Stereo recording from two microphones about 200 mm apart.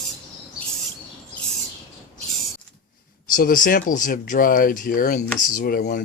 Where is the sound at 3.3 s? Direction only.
45° left (ahead or behind).